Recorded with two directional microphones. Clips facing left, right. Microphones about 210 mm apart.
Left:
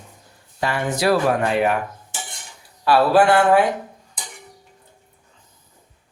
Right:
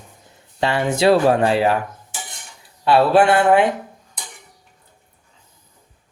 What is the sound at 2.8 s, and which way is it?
Speech, 25° right (ahead or behind).